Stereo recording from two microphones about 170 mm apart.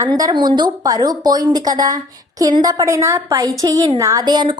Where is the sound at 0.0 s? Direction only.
25° right (ahead or behind).